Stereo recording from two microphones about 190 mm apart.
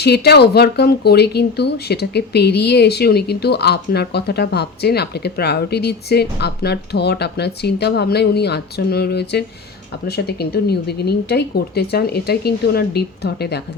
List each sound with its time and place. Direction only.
0.0 s speech: 60° left (ahead or behind)